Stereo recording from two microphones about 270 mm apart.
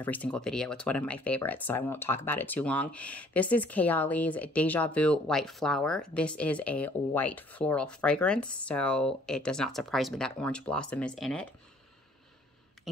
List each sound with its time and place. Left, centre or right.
0.0 s speech: centre